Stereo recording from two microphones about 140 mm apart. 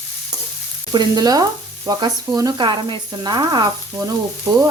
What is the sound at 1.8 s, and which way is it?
Frying, 25° right (ahead or behind).